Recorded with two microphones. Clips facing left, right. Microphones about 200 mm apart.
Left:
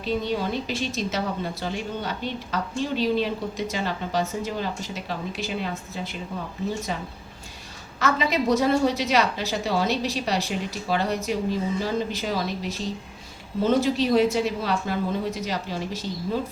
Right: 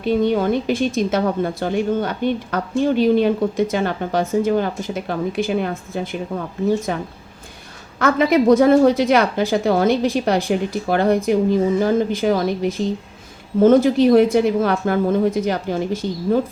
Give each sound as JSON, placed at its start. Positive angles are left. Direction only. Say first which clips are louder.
{"t": 0.0, "sound": "a woman's voice", "louder": "right 8 dB", "side_deg": -55}